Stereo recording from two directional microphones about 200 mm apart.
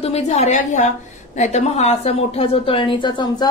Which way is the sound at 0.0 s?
30° left (ahead or behind).